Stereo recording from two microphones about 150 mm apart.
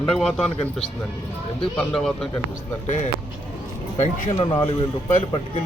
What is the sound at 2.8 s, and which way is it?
Speech, 50° left (ahead or behind).